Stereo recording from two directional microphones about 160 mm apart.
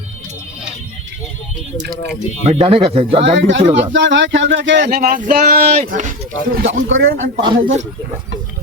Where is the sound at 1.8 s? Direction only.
90° right.